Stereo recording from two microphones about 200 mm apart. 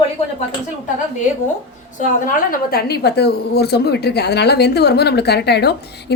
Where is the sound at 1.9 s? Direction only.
45° left (ahead or behind).